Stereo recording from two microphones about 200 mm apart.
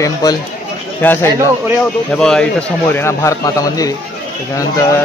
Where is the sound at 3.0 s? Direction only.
15° left (ahead or behind).